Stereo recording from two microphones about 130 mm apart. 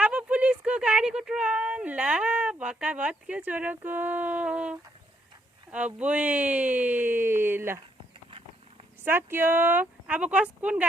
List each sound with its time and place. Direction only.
0.0 s speech: 10° right (ahead or behind)
8.3 s a sound: 45° right (ahead or behind)
9.0 s speech: 15° right (ahead or behind)